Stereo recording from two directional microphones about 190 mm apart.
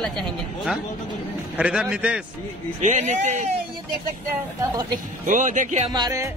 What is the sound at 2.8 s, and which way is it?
Speech, 40° right (ahead or behind).